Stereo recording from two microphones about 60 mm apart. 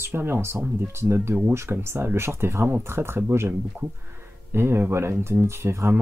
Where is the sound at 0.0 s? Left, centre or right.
Right.